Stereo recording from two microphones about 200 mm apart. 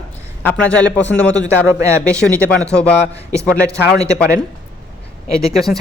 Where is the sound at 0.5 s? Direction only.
5° left (ahead or behind).